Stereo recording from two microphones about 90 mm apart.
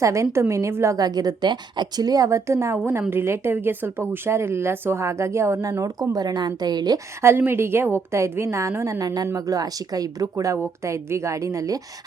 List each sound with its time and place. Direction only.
0.0 s a woman's voice: 35° right (ahead or behind)
0.9 s a woman's voice: 45° right (ahead or behind)
7.2 s a woman's voice: 25° right (ahead or behind)